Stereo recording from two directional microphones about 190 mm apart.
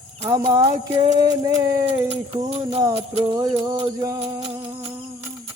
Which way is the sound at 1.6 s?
20° right (ahead or behind).